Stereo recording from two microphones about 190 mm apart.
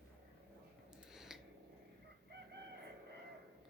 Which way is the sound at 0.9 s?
5° right (ahead or behind).